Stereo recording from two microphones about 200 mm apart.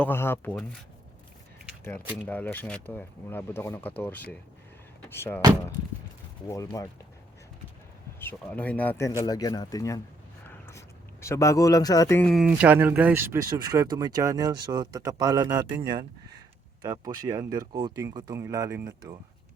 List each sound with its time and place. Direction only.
0.0 s speech: 10° left (ahead or behind)
2.2 s speech: 10° left (ahead or behind)
6.5 s speech: 15° left (ahead or behind)
8.2 s speech: 10° left (ahead or behind)
10.4 s a sound: 15° left (ahead or behind)
12.3 s speech: 5° right (ahead or behind)